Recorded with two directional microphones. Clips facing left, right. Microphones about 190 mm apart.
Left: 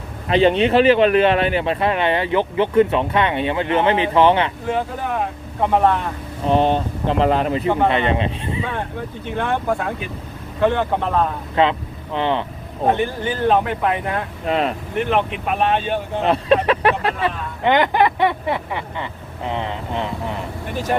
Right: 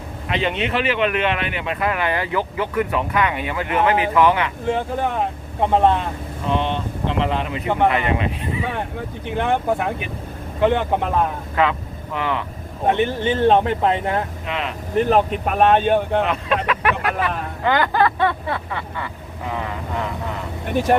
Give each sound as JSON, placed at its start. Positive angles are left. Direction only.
{"t": 0.3, "sound": "speech", "side_deg": 35}
{"t": 5.7, "sound": "speech", "side_deg": -20}
{"t": 6.5, "sound": "speech", "side_deg": 40}
{"t": 7.9, "sound": "speech", "side_deg": 25}
{"t": 9.2, "sound": "speech", "side_deg": -20}
{"t": 11.5, "sound": "speech", "side_deg": 30}
{"t": 13.0, "sound": "speech", "side_deg": -25}
{"t": 14.4, "sound": "speech", "side_deg": 40}
{"t": 14.9, "sound": "speech", "side_deg": -35}
{"t": 16.2, "sound": "speech", "side_deg": 35}